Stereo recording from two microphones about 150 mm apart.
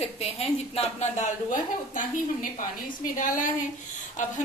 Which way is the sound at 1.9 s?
60° left (ahead or behind).